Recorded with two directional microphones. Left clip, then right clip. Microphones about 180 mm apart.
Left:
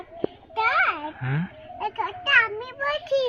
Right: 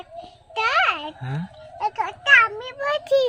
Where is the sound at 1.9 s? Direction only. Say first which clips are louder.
Right 4 dB; 45° right (ahead or behind).